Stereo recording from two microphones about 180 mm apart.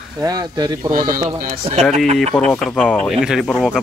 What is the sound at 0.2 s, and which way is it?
Speech, 20° right (ahead or behind).